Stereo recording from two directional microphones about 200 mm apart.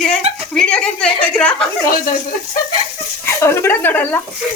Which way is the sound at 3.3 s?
15° left (ahead or behind).